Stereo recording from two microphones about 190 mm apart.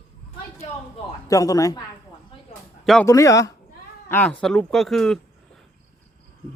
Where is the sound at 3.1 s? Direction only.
15° left (ahead or behind); by 5.2 s centre (ahead or behind).